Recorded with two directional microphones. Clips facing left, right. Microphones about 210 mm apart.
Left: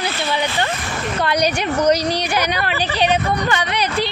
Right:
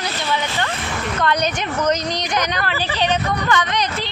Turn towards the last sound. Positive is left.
turn(degrees=10)  # may be behind; listen again after turning